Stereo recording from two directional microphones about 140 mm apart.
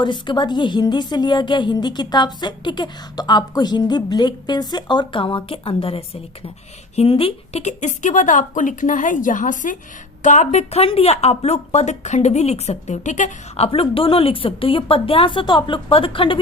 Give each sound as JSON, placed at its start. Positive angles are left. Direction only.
{"t": 0.0, "sound": "a woman's voice", "side_deg": 35}
{"t": 13.7, "sound": "a woman's voice", "side_deg": 40}